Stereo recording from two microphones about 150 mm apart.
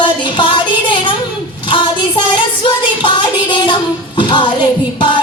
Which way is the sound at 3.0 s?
30° left (ahead or behind).